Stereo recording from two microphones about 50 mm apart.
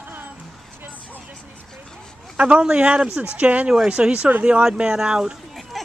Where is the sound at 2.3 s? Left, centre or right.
Right.